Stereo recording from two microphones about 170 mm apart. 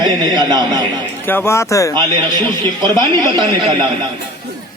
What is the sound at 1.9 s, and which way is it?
A man's voice, 25° right (ahead or behind).